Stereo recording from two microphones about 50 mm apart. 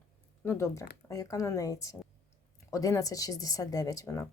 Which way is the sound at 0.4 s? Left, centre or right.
Left.